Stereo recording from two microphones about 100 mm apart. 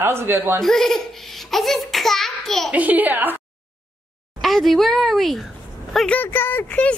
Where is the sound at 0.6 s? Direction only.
5° left (ahead or behind).